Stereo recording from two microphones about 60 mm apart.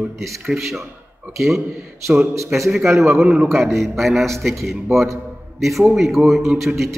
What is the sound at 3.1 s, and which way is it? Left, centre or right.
Speech, centre.